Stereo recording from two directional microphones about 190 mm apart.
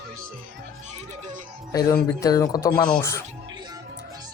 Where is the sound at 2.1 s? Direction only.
15° left (ahead or behind).